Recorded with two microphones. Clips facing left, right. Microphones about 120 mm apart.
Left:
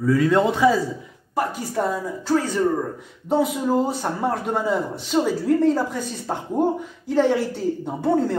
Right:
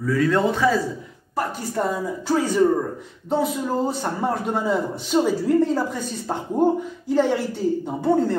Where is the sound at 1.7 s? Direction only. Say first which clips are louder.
Right 1 dB; centre (ahead or behind).